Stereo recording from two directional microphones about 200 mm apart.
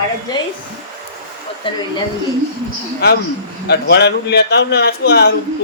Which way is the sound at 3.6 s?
55° left (ahead or behind).